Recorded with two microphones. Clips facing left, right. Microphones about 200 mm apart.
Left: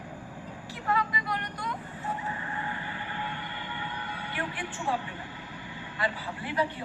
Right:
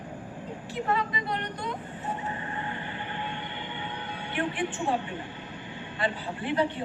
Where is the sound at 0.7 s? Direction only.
25° right (ahead or behind).